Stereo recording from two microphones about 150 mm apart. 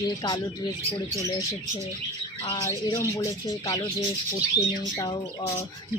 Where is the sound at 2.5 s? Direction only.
20° left (ahead or behind).